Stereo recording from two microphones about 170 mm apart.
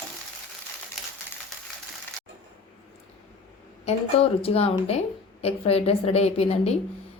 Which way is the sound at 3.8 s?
35° left (ahead or behind).